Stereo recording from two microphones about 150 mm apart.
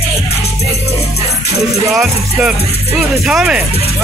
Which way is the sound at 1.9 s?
Centre (ahead or behind).